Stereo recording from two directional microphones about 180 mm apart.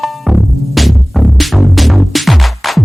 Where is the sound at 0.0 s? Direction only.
Centre (ahead or behind).